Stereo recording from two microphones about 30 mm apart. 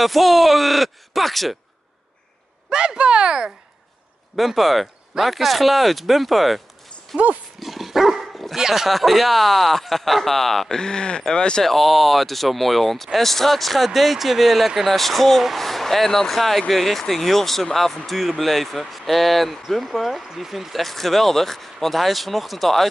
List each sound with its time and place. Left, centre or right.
0.0 s speech: centre
2.7 s speech: right
4.4 s speech: centre
7.6 s dog: centre
8.5 s speech: centre
8.8 s speech: centre
10.7 s speech: left
11.6 s speech: centre
20.7 s speech: centre